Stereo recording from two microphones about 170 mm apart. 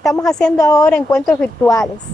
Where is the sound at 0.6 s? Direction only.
20° left (ahead or behind).